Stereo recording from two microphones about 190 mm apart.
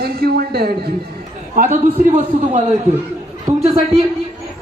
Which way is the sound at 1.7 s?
35° right (ahead or behind).